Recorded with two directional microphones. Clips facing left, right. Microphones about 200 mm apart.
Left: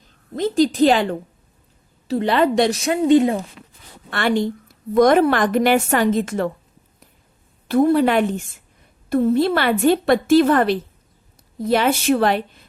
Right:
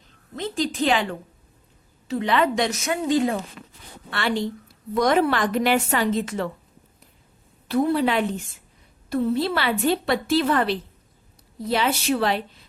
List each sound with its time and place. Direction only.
0.3 s a woman's voice: 40° left (ahead or behind)
3.2 s speech: 20° left (ahead or behind)
4.1 s a woman's voice: 50° left (ahead or behind)
7.7 s a woman's voice: 50° left (ahead or behind)